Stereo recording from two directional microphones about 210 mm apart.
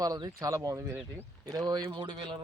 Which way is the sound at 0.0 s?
20° right (ahead or behind).